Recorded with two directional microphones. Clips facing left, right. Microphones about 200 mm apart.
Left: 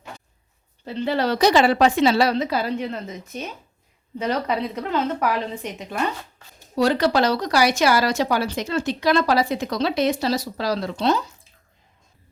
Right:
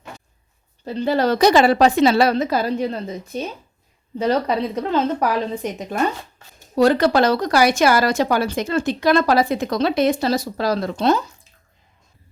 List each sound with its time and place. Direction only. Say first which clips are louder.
0.9 s a woman's voice: right 4 dB; 40° right (ahead or behind)